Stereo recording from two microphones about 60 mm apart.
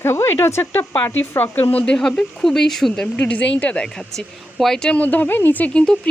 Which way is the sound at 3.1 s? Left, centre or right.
Left.